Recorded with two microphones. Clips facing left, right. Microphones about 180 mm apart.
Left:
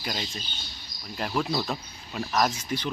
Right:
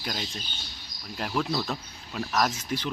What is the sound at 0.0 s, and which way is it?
Speech, 5° left (ahead or behind).